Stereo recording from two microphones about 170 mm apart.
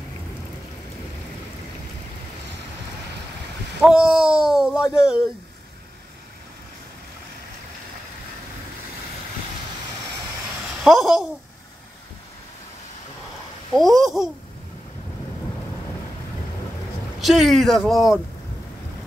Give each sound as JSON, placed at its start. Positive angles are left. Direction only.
{"t": 3.9, "sound": "speech", "side_deg": -5}
{"t": 10.8, "sound": "speech", "side_deg": 0}
{"t": 13.7, "sound": "speech", "side_deg": 0}
{"t": 17.2, "sound": "speech", "side_deg": 0}